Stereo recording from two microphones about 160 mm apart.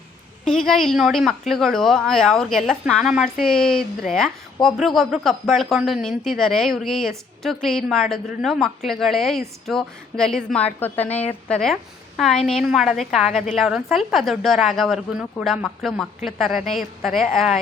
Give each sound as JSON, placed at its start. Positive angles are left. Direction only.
{"t": 0.4, "sound": "a woman's voice", "side_deg": 5}